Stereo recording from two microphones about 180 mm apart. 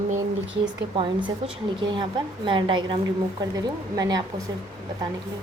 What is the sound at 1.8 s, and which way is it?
A woman's voice, 25° right (ahead or behind).